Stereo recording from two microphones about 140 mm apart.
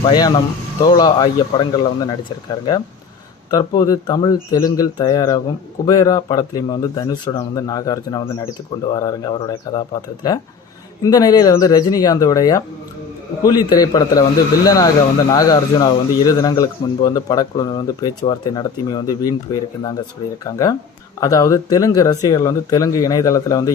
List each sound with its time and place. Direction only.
0.0 s a man's voice: 30° left (ahead or behind)